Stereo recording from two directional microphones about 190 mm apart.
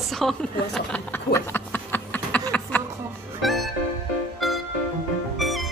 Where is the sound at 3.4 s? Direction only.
Centre (ahead or behind).